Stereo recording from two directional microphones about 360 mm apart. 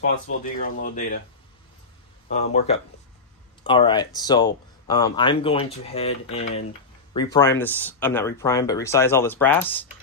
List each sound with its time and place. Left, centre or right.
0.5 s speech: left
2.3 s speech: centre